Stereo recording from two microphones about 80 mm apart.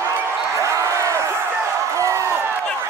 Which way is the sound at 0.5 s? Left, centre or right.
Right.